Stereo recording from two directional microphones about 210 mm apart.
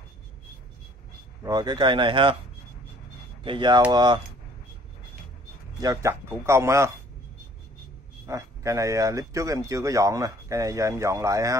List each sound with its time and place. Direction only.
1.4 s speech: 20° right (ahead or behind)
3.4 s speech: 20° right (ahead or behind)
5.8 s speech: 15° right (ahead or behind)
8.3 s speech: 15° right (ahead or behind)